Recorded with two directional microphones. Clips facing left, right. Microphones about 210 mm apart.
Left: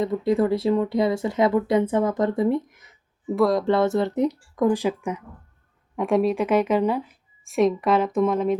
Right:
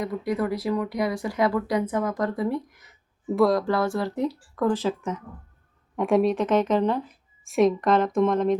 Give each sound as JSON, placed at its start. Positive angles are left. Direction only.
{"t": 0.0, "sound": "speech", "side_deg": 25}
{"t": 3.2, "sound": "a woman's voice", "side_deg": 0}
{"t": 3.6, "sound": "speech", "side_deg": 25}
{"t": 6.0, "sound": "a woman's voice", "side_deg": 0}